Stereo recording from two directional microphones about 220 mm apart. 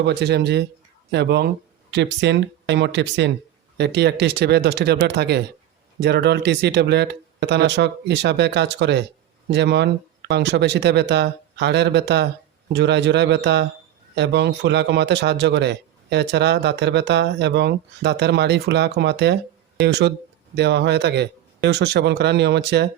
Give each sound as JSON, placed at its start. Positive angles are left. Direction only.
{"t": 0.0, "sound": "a man's voice", "side_deg": -50}